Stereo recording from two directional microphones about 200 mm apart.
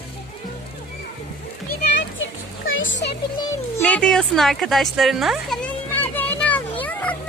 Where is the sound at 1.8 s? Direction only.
65° left (ahead or behind).